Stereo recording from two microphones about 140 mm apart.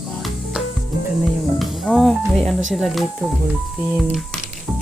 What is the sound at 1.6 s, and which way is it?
Speech, centre (ahead or behind).